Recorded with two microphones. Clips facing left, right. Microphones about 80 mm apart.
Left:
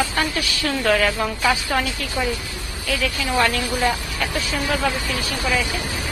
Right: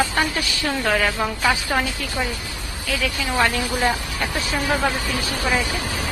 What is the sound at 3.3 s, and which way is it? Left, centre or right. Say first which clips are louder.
Speech: left 1 dB; centre.